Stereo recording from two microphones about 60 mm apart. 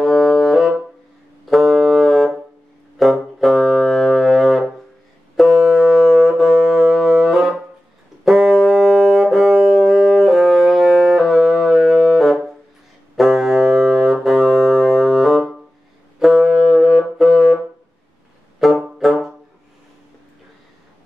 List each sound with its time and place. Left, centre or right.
0.0 s brass instrument: centre
3.0 s music: centre
8.3 s brass instrument: centre
11.8 s music: centre
16.2 s brass instrument: centre
18.8 s music: centre